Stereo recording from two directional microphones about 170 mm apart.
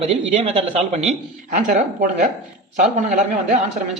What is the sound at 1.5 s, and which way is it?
A man's voice, 50° right (ahead or behind).